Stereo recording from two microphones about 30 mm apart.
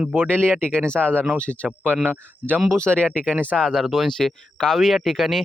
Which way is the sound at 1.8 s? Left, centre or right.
Right.